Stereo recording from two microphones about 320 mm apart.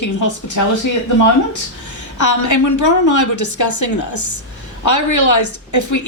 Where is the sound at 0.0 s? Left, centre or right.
Left.